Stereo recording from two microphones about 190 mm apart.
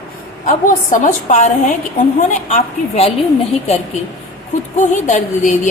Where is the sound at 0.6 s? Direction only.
45° left (ahead or behind).